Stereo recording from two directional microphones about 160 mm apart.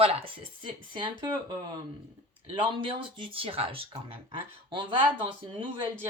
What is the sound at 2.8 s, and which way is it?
Speech, 30° right (ahead or behind).